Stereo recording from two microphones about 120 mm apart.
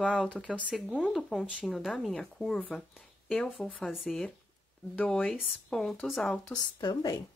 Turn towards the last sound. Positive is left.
turn(degrees=35)  # may be behind; listen again after turning